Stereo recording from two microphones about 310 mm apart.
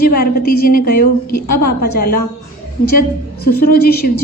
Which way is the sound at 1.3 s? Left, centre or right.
Left.